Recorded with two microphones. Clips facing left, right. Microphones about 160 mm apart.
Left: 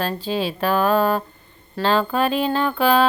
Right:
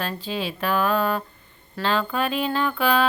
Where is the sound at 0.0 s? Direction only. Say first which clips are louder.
Left 5 dB; 35° left (ahead or behind).